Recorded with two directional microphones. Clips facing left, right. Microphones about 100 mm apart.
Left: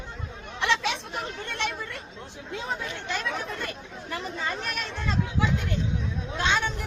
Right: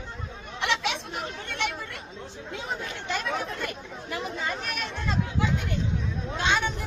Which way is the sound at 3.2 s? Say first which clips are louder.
Right 1 dB; 5° right (ahead or behind).